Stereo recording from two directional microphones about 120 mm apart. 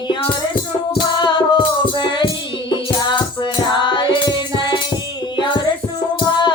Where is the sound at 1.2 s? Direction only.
40° left (ahead or behind).